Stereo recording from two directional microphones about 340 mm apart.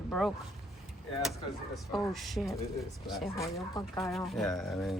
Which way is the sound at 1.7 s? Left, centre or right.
Centre.